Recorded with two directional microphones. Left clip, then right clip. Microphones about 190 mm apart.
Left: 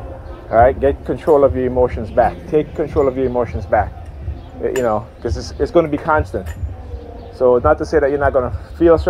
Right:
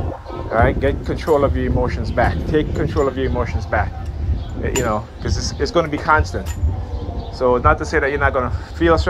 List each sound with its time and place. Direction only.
0.5 s speech: 40° left (ahead or behind)
7.3 s speech: 45° left (ahead or behind)